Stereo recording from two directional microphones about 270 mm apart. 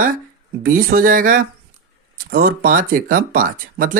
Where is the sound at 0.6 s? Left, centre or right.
Right.